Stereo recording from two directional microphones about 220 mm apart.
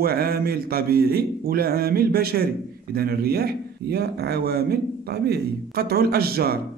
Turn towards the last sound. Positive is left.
turn(degrees=-45)  # may be behind; listen again after turning